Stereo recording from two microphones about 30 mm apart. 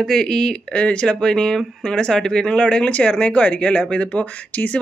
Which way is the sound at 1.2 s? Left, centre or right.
Left.